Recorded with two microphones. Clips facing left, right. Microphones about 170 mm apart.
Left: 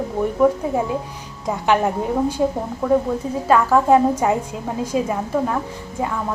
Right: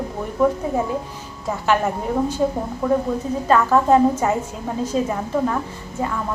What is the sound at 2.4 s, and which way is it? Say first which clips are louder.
A woman's voice: even; 10° left (ahead or behind).